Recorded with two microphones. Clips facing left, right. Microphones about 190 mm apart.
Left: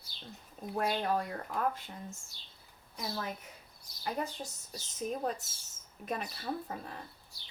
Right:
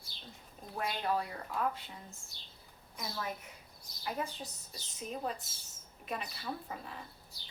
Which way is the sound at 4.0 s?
45° left (ahead or behind).